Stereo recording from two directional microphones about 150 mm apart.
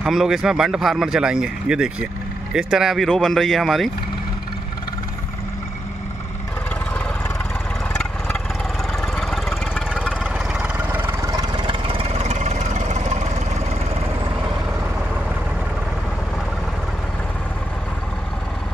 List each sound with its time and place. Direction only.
0.0 s speech: centre (ahead or behind)
7.9 s vehicle: 5° left (ahead or behind)
9.0 s a sound: 5° left (ahead or behind); by 13.3 s 50° right (ahead or behind)